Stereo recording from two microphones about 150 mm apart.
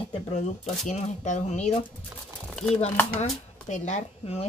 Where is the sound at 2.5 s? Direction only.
5° left (ahead or behind).